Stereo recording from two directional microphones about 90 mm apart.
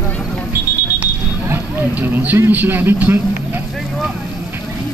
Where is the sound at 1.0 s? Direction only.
20° right (ahead or behind).